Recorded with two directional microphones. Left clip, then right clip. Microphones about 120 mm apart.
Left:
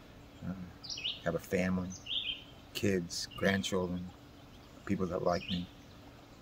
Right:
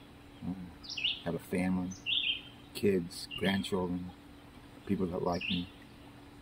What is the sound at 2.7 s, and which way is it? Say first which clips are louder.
Speech: right 3 dB; 40° left (ahead or behind).